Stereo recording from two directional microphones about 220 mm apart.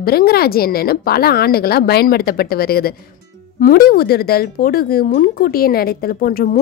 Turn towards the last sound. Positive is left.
turn(degrees=40)  # may be behind; listen again after turning